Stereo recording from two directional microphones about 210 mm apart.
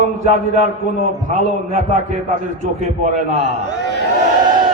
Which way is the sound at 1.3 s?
35° right (ahead or behind).